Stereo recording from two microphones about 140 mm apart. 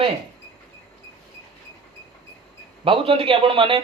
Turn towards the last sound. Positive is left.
turn(degrees=-40)  # may be behind; listen again after turning